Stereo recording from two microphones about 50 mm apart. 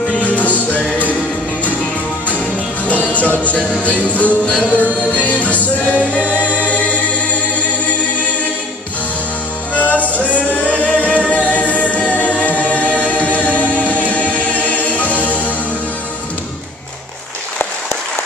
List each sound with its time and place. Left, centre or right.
0.1 s music: left
2.2 s music: left
6.3 s choir: left
9.8 s singing: left